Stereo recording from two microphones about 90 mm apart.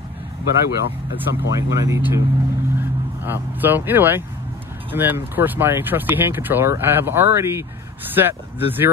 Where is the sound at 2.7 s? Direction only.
25° right (ahead or behind).